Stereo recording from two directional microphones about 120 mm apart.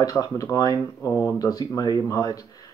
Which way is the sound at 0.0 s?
30° left (ahead or behind).